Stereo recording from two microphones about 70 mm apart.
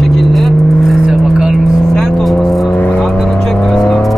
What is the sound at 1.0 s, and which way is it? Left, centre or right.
Vehicle, centre.